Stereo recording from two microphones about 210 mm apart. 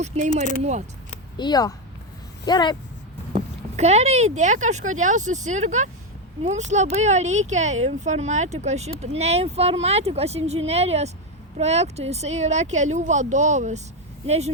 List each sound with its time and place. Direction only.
0.1 s speech: 30° right (ahead or behind)
1.4 s speech: 20° left (ahead or behind)
3.3 s speech: 30° right (ahead or behind)